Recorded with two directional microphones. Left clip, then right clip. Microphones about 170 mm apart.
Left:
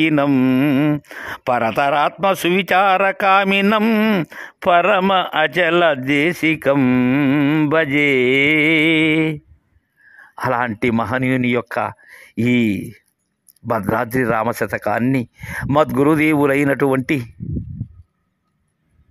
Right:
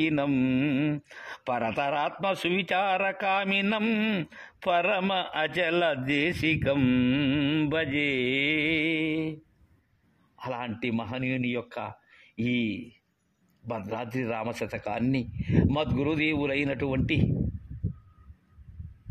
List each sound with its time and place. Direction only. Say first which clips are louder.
0.0 s speech: left 11 dB; 30° left (ahead or behind); by 9.4 s 50° left (ahead or behind)
10.3 s speech: left 15 dB; 40° left (ahead or behind)
15.7 s speech: left 14 dB; 40° left (ahead or behind)